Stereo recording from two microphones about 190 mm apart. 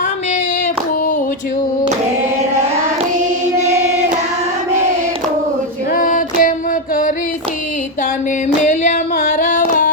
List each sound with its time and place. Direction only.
5.9 s female singing: 45° left (ahead or behind)
8.6 s singing: 40° left (ahead or behind)